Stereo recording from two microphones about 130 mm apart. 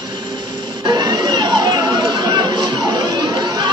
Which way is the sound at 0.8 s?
30° right (ahead or behind).